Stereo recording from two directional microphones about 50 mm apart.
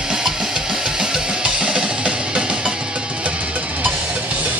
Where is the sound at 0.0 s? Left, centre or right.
Centre.